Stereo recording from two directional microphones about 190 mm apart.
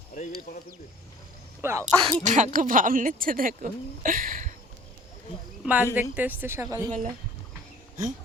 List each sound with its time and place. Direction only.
0.1 s speech: 45° left (ahead or behind)
1.6 s a woman's voice: 10° right (ahead or behind)
2.0 s speech: 25° right (ahead or behind)
2.2 s speech: 40° right (ahead or behind)
5.6 s a woman's voice: 10° right (ahead or behind)
8.0 s speech: 45° right (ahead or behind)